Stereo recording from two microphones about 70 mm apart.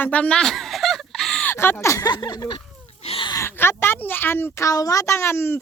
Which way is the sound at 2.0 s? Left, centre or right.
Left.